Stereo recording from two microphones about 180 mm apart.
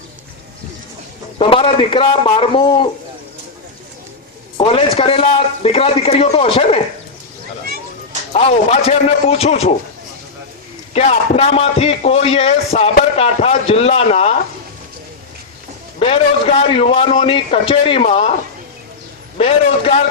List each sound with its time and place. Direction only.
1.4 s a man's voice: 30° left (ahead or behind)
4.5 s a man's voice: 30° left (ahead or behind)
8.3 s a man's voice: 35° left (ahead or behind)
10.9 s a man's voice: 35° left (ahead or behind)
16.0 s a man's voice: 30° left (ahead or behind)
19.4 s a man's voice: 35° left (ahead or behind)